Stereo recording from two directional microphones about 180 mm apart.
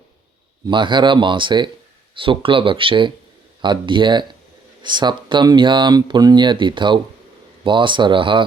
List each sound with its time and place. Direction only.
0.7 s speech: 25° right (ahead or behind)